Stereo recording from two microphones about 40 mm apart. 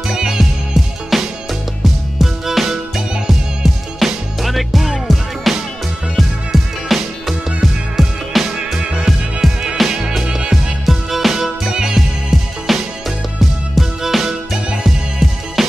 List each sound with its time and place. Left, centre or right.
0.1 s music: centre